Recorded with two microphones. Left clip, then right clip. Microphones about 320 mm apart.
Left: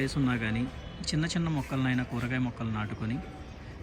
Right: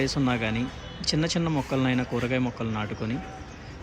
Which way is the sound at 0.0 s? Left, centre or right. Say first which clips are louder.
Right 5 dB; centre.